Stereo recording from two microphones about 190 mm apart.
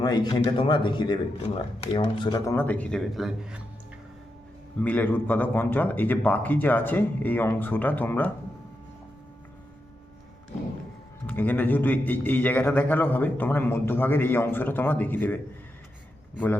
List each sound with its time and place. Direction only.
0.0 s speech: 20° left (ahead or behind); by 3.6 s centre (ahead or behind)
4.8 s a man's voice: 10° left (ahead or behind)
11.3 s a man's voice: 10° left (ahead or behind)